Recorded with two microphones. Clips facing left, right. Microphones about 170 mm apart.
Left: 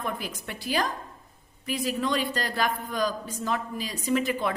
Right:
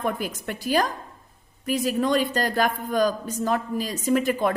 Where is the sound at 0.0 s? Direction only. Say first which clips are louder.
Right 6 dB; 50° right (ahead or behind).